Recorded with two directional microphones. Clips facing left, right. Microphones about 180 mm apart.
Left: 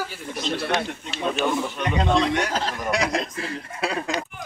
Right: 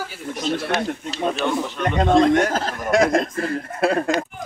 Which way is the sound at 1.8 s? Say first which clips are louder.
Right 6 dB; 50° right (ahead or behind).